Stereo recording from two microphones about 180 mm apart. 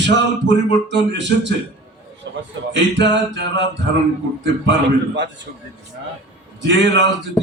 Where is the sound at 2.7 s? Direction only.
75° right (ahead or behind).